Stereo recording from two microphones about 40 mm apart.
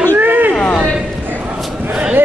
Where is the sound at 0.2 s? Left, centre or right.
Right.